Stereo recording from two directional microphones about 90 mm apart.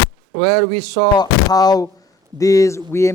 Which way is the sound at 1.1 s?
50° left (ahead or behind).